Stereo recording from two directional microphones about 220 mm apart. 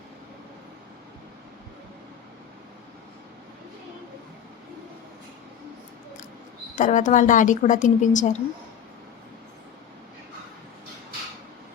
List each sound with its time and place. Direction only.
6.7 s speech: 35° left (ahead or behind)